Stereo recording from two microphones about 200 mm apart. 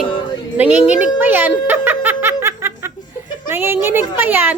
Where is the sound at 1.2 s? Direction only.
10° right (ahead or behind).